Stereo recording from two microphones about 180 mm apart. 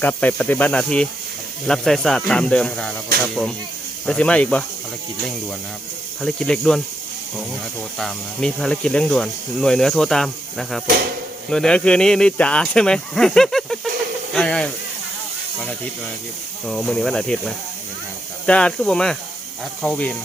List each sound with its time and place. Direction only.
0.0 s speech: 10° left (ahead or behind)
4.0 s speech: 5° left (ahead or behind)
6.2 s speech: 5° left (ahead or behind)
7.9 s speech: 5° left (ahead or behind)
16.6 s speech: 5° left (ahead or behind)